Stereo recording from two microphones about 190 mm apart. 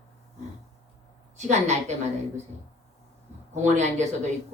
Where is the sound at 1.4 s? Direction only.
35° right (ahead or behind).